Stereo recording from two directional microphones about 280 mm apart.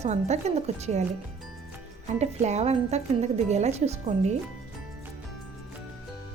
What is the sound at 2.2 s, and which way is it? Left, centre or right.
Speech, right.